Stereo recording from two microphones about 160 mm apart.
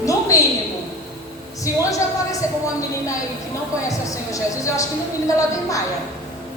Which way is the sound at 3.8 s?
20° left (ahead or behind).